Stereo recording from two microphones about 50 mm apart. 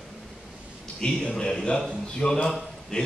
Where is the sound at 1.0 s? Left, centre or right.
Centre.